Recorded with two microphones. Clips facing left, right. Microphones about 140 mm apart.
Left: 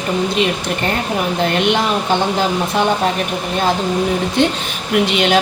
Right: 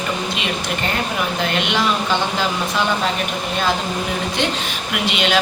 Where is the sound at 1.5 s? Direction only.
45° left (ahead or behind).